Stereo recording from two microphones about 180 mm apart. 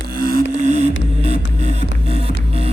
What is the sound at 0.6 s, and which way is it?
Music, 40° right (ahead or behind).